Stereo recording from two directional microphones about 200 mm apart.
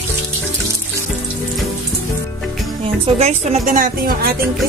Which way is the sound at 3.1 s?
35° right (ahead or behind).